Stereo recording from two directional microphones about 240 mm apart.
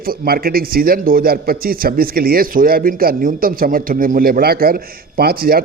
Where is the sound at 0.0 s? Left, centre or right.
Right.